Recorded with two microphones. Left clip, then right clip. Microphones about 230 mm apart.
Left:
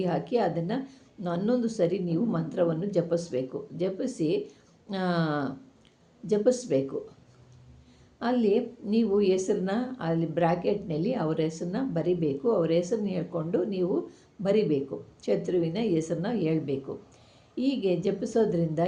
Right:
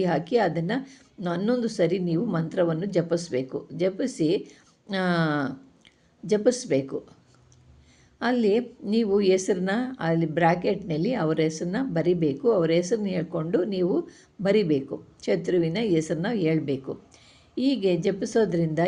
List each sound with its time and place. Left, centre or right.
0.0 s a woman's voice: right
8.2 s a woman's voice: right